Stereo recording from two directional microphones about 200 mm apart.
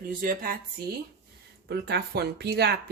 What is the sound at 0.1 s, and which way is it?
Speech, 45° right (ahead or behind).